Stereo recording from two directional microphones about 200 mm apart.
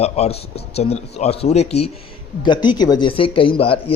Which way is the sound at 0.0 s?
30° left (ahead or behind).